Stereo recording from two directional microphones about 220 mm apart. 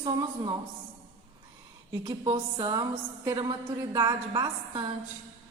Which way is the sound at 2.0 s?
20° right (ahead or behind).